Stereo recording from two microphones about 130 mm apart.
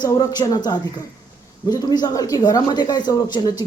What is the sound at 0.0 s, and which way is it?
Speech, 30° left (ahead or behind).